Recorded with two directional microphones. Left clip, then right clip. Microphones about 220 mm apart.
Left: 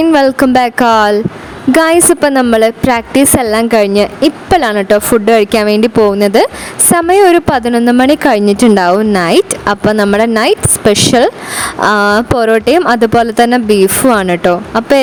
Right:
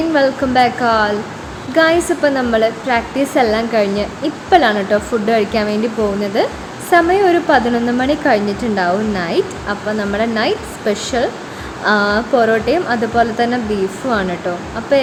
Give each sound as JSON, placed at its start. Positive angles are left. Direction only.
{"t": 0.1, "sound": "speech", "side_deg": 55}